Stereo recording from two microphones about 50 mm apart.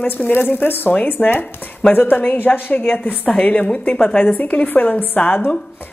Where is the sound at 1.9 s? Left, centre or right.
Left.